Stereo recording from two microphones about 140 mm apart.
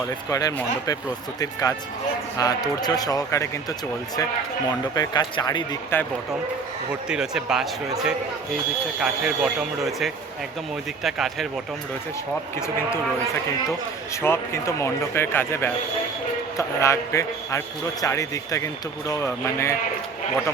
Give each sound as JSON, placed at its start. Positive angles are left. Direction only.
{"t": 0.3, "sound": "speech", "side_deg": 25}
{"t": 2.4, "sound": "speech", "side_deg": 25}
{"t": 4.9, "sound": "speech", "side_deg": 30}
{"t": 5.9, "sound": "speech", "side_deg": 15}
{"t": 7.1, "sound": "speech", "side_deg": -5}
{"t": 12.5, "sound": "speech", "side_deg": 20}
{"t": 14.2, "sound": "speech", "side_deg": 20}